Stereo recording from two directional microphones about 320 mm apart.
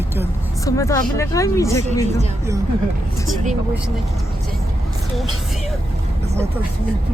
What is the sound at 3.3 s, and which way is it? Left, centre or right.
Speech, right.